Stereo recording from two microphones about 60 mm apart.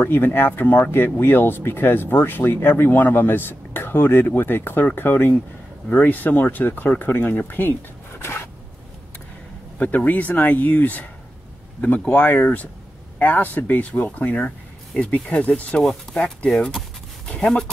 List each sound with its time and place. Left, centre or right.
0.0 s speech: left
8.2 s zipper: left
9.8 s speech: left
12.1 s speech: left
15.8 s speech: centre
16.2 s speech: centre